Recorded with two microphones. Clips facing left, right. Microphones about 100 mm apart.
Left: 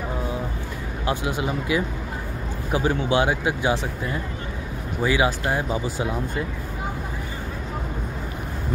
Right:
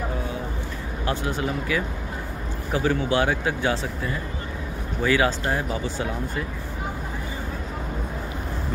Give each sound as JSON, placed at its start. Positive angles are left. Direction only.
{"t": 1.0, "sound": "speech", "side_deg": 15}
{"t": 5.0, "sound": "speech", "side_deg": 15}